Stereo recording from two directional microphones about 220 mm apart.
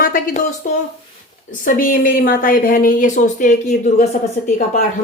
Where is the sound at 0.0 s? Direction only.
40° left (ahead or behind).